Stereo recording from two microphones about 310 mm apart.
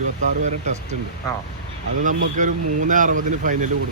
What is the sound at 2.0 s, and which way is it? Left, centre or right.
Speech, right.